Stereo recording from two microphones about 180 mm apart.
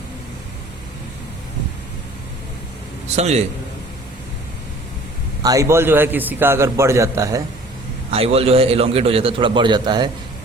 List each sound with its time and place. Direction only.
3.2 s a man's voice: 35° right (ahead or behind)
5.4 s a man's voice: 20° right (ahead or behind)
8.1 s a man's voice: 35° right (ahead or behind)